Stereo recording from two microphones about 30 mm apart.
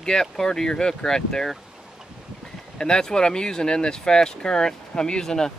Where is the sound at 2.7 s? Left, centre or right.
Left.